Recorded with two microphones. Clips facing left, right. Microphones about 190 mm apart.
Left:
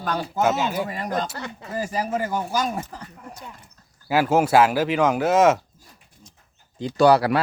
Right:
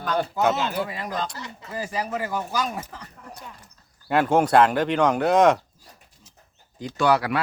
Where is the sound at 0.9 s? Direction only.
45° left (ahead or behind).